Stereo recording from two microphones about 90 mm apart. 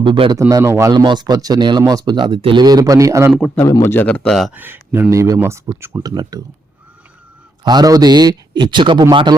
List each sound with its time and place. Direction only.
0.0 s a man's voice: 65° right (ahead or behind)
0.3 s a man's voice: 35° right (ahead or behind)
0.9 s a man's voice: 55° right (ahead or behind)
2.6 s a man's voice: 45° right (ahead or behind)
3.8 s a man's voice: 20° left (ahead or behind)
4.3 s speech: centre (ahead or behind)
4.5 s speech: 20° right (ahead or behind)
6.0 s a man's voice: 45° right (ahead or behind)
7.7 s a man's voice: 45° right (ahead or behind)